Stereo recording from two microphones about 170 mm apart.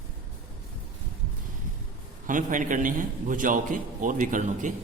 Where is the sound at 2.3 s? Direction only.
50° right (ahead or behind).